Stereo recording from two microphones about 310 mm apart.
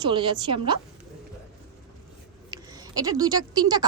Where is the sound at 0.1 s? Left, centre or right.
Centre.